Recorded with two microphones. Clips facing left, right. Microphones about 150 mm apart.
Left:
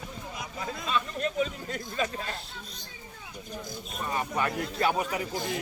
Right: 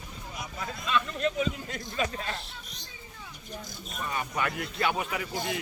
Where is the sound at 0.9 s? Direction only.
40° left (ahead or behind).